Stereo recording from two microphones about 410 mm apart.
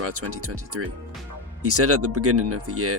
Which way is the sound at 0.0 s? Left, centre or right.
Right.